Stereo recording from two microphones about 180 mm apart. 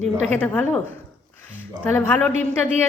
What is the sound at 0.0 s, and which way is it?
Speech, 40° right (ahead or behind).